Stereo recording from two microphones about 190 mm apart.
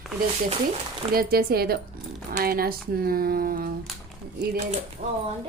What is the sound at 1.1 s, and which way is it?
Speech, 50° right (ahead or behind).